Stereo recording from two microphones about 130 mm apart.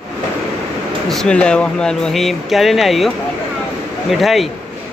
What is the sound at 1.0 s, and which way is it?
Speech, 5° left (ahead or behind).